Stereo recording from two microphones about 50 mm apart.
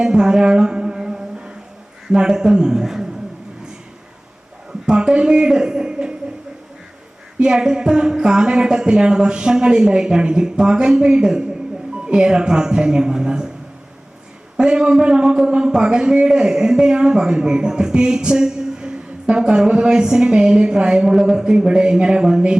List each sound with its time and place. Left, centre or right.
0.0 s music: centre
2.0 s a man's voice: centre
4.9 s a man's voice: centre
7.3 s a man's voice: centre
14.5 s a man's voice: centre